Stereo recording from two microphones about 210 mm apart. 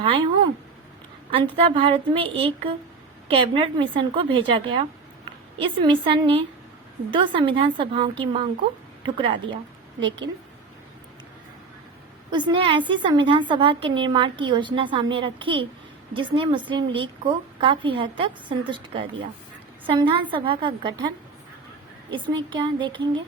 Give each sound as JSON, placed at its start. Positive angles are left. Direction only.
{"t": 0.0, "sound": "speech", "side_deg": -25}
{"t": 1.3, "sound": "a woman's voice", "side_deg": -25}
{"t": 12.3, "sound": "a woman's voice", "side_deg": -20}
{"t": 22.1, "sound": "a woman's voice", "side_deg": -20}